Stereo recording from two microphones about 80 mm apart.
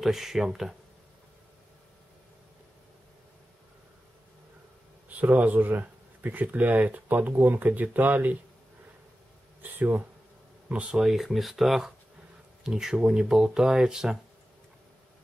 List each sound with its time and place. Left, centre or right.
0.0 s speech: centre
5.1 s speech: right
9.6 s speech: right
10.7 s speech: centre